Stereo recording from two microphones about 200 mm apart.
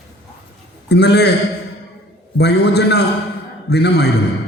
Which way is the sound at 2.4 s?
55° left (ahead or behind).